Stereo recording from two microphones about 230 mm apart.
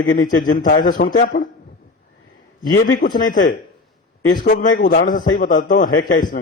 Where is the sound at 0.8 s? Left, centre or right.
Left.